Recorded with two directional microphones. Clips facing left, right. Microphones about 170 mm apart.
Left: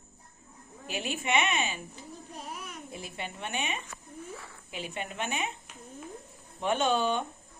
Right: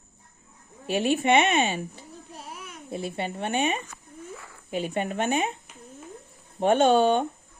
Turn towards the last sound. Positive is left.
turn(degrees=-55)  # may be behind; listen again after turning